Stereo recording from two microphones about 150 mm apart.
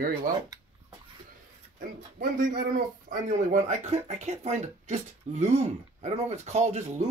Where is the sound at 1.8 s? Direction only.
65° right (ahead or behind).